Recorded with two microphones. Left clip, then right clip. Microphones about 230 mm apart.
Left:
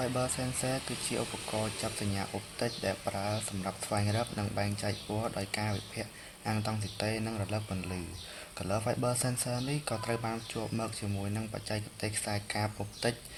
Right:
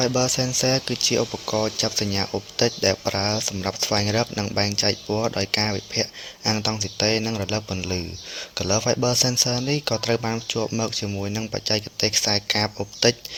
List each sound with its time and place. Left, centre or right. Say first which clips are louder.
0.0 s speech: right 12 dB; right